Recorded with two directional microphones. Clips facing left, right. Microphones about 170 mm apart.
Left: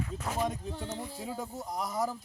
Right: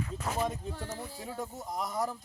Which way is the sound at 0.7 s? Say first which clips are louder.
Left 1 dB; 20° left (ahead or behind).